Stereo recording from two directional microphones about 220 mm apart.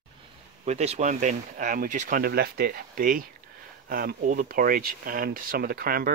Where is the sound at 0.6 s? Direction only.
30° right (ahead or behind).